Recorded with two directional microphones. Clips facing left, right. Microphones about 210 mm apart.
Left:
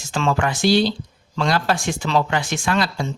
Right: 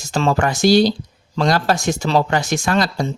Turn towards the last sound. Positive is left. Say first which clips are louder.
# right 3 dB
turn(degrees=-40)  # may be behind; listen again after turning